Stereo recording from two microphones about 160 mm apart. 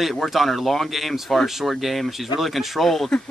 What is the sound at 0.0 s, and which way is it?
Speech, centre (ahead or behind).